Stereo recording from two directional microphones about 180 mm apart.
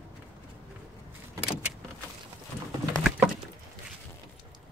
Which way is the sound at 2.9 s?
5° right (ahead or behind).